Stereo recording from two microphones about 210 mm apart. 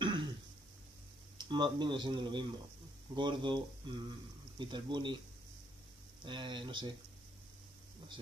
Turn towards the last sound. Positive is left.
turn(degrees=-20)  # may be behind; listen again after turning